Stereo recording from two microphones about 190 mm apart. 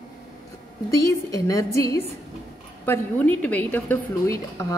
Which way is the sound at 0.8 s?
20° left (ahead or behind).